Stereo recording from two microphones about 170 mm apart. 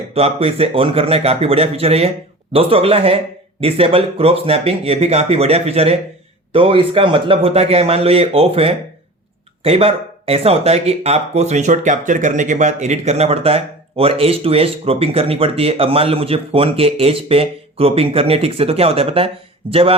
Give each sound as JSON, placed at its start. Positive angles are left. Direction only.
{"t": 0.1, "sound": "speech", "side_deg": -35}